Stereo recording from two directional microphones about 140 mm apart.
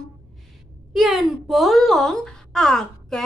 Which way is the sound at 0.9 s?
Centre (ahead or behind).